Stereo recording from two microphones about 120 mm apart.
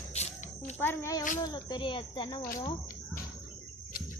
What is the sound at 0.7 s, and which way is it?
Speech, 20° left (ahead or behind).